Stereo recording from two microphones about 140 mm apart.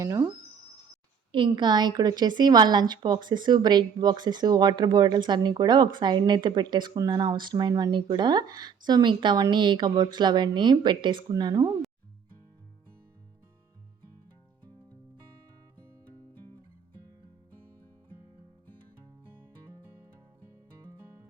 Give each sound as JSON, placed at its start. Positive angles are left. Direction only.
{"t": 0.0, "sound": "speech", "side_deg": -20}
{"t": 1.3, "sound": "a woman's voice", "side_deg": -35}